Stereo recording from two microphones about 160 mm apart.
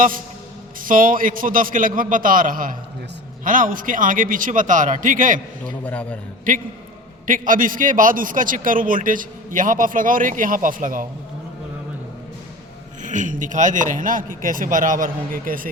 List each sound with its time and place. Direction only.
0.8 s a man's voice: 60° right (ahead or behind)
5.8 s a man's voice: 10° left (ahead or behind)
6.5 s a man's voice: 60° right (ahead or behind)
13.0 s a man's voice: 50° right (ahead or behind)